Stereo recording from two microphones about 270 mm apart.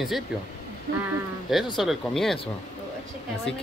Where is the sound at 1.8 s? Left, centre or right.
Centre.